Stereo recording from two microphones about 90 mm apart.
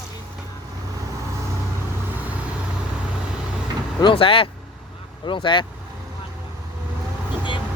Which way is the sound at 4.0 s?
75° left (ahead or behind).